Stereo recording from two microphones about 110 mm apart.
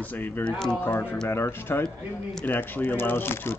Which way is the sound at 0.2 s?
15° left (ahead or behind).